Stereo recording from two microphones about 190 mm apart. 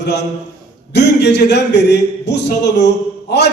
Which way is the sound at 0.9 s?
65° left (ahead or behind).